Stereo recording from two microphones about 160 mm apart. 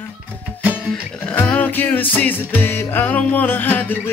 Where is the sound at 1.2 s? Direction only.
10° left (ahead or behind).